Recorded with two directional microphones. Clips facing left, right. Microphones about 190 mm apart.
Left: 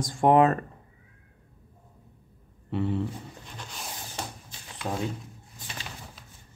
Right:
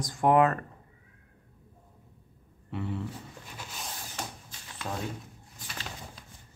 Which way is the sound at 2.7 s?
30° left (ahead or behind).